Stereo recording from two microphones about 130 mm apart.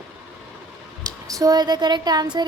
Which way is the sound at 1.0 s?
25° right (ahead or behind).